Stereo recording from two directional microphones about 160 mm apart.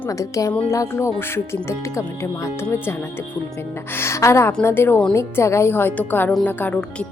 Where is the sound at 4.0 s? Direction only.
15° left (ahead or behind).